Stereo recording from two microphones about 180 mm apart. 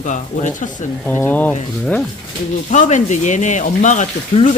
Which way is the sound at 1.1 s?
10° left (ahead or behind).